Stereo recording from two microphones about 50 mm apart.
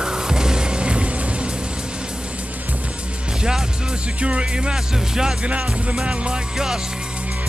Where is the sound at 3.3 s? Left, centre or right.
Centre.